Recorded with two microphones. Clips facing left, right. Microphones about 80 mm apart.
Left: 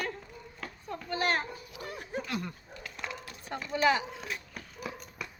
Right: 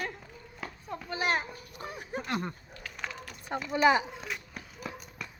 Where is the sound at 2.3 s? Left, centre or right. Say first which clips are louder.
Right 6 dB; right.